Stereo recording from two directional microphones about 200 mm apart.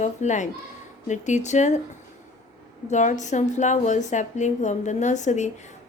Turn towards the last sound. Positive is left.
turn(degrees=35)  # may be behind; listen again after turning